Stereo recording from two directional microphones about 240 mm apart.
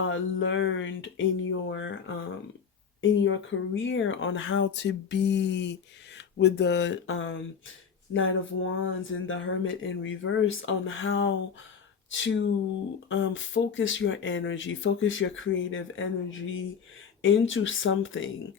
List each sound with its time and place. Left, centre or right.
0.0 s speech: left